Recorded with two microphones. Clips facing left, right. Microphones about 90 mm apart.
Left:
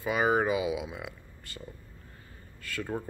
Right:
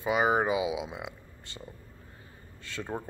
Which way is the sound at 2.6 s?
25° right (ahead or behind).